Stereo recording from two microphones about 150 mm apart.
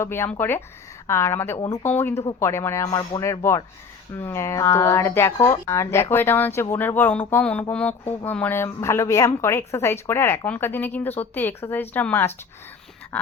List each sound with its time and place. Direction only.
0.0 s a woman's voice: 15° left (ahead or behind)